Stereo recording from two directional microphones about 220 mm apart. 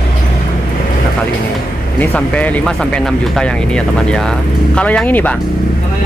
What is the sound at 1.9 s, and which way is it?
Speech, 5° left (ahead or behind).